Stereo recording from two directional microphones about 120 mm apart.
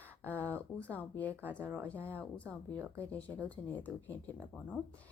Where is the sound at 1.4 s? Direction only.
20° right (ahead or behind).